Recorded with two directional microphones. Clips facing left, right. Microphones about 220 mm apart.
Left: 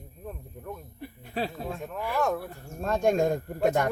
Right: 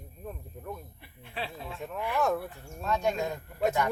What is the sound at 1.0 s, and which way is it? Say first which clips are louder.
Speech: left 7 dB; 40° left (ahead or behind).